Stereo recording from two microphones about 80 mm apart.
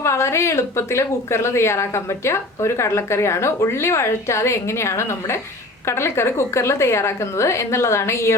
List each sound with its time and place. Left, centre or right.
0.0 s a woman's voice: left